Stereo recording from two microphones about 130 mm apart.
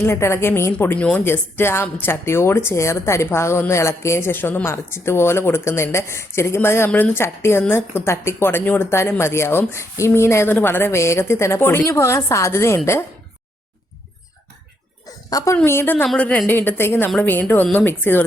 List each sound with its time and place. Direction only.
0.0 s speech: 20° left (ahead or behind)
15.3 s a woman's voice: 25° left (ahead or behind)